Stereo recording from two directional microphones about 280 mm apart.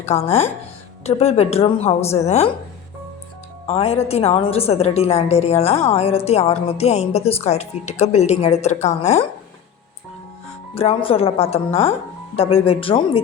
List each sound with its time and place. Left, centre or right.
0.0 s a woman's voice: left
3.7 s a woman's voice: left
10.8 s a woman's voice: left